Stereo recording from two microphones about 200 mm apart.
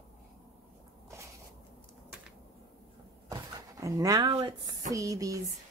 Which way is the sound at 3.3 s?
15° right (ahead or behind).